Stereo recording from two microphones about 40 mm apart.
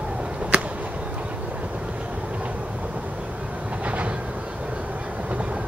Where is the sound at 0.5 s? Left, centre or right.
Right.